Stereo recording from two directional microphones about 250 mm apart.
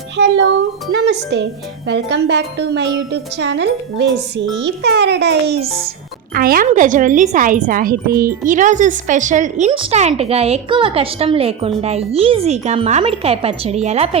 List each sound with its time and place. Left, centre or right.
1.0 s speech: right